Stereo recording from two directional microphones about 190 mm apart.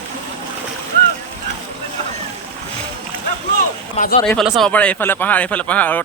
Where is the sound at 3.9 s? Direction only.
45° left (ahead or behind).